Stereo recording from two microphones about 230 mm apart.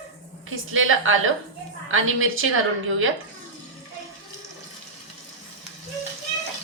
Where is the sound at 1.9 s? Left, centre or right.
Right.